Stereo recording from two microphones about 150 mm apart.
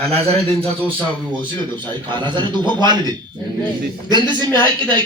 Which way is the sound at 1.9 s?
30° right (ahead or behind).